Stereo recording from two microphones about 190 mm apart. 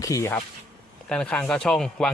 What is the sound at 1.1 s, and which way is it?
Speech, 5° left (ahead or behind).